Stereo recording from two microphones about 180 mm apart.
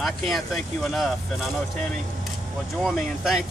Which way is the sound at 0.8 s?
Centre (ahead or behind).